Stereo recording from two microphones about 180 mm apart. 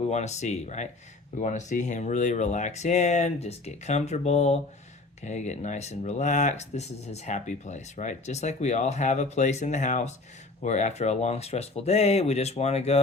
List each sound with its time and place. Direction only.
0.1 s speech: 40° left (ahead or behind)